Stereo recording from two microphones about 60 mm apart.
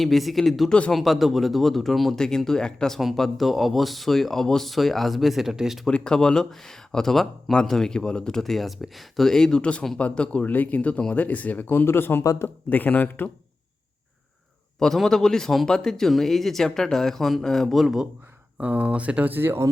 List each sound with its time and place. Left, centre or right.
0.0 s speech: centre
0.7 s speech: centre
0.9 s speech: centre
3.0 s speech: centre
5.9 s speech: centre; by 12.2 s left
12.2 s a man's voice: left
12.7 s speech: left
14.8 s speech: centre
18.5 s speech: right